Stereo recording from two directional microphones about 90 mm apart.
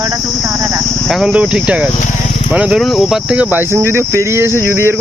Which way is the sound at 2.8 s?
Centre (ahead or behind).